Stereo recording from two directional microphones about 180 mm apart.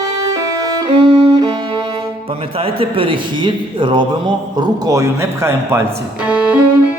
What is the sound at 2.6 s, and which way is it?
A man's voice, 30° right (ahead or behind).